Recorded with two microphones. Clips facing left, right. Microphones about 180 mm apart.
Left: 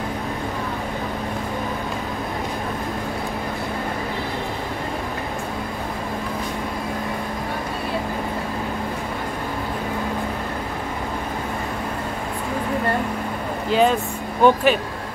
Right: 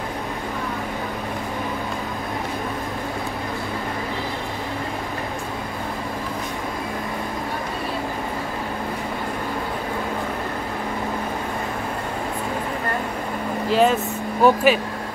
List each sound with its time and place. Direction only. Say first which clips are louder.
13.7 s vehicle: even; centre (ahead or behind)
14.4 s speech: even; 5° right (ahead or behind)